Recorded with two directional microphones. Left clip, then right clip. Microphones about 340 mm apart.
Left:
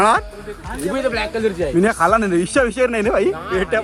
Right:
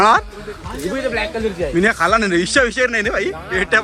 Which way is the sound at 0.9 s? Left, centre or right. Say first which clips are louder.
Even; left.